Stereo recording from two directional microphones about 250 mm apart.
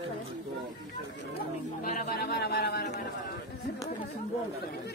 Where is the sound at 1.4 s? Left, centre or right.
Left.